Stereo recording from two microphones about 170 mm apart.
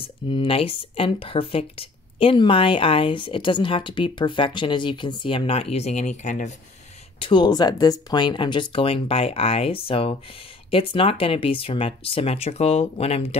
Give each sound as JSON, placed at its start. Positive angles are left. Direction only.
{"t": 0.0, "sound": "speech", "side_deg": 30}
{"t": 7.2, "sound": "speech", "side_deg": 30}